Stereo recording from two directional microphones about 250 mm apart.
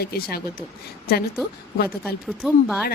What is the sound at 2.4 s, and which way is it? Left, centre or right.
Speech, centre.